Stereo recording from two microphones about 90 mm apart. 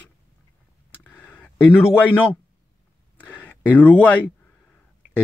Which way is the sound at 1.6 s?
25° left (ahead or behind).